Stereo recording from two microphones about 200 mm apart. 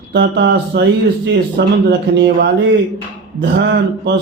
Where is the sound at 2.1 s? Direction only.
60° right (ahead or behind).